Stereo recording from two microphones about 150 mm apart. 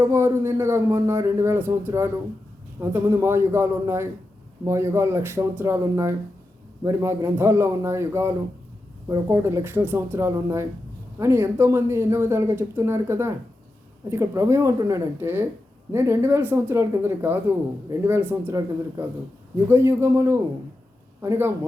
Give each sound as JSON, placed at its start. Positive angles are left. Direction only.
{"t": 0.0, "sound": "a man's voice", "side_deg": -20}